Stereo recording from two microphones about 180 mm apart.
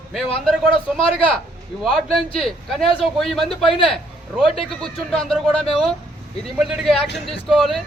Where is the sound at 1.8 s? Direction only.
Centre (ahead or behind).